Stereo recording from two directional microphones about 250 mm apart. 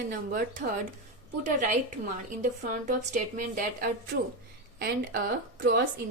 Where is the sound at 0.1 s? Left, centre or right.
Right.